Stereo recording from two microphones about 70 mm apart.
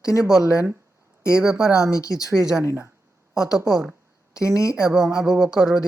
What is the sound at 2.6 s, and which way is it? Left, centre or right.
Speech, right.